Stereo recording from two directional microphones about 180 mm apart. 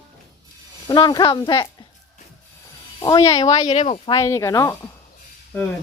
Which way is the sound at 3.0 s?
20° left (ahead or behind).